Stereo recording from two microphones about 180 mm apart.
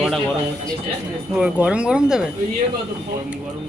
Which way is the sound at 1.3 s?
5° right (ahead or behind).